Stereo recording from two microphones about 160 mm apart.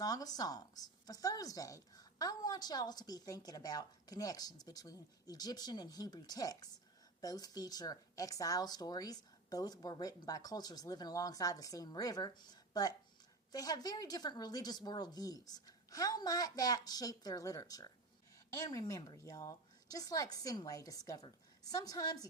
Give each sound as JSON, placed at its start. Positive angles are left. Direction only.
{"t": 0.0, "sound": "speech", "side_deg": 25}
{"t": 13.5, "sound": "speech", "side_deg": 25}